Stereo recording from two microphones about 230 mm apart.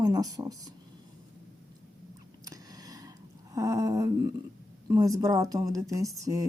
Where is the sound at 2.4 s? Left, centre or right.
Centre.